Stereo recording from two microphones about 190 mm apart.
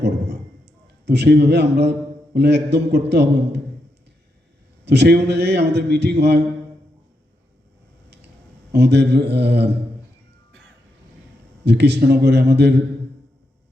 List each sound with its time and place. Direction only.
0.0 s a sound: 60° right (ahead or behind)
2.6 s a man's voice: 60° right (ahead or behind)
4.9 s a man's voice: 60° right (ahead or behind)
8.7 s a man's voice: 60° right (ahead or behind)
11.6 s a man's voice: 60° right (ahead or behind)